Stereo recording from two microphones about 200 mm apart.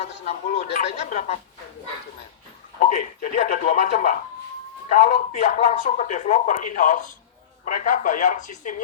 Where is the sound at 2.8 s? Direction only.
35° left (ahead or behind).